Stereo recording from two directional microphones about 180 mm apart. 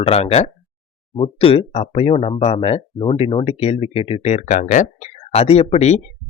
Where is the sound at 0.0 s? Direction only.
35° left (ahead or behind).